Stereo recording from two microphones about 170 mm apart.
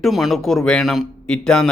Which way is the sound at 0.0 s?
Centre (ahead or behind).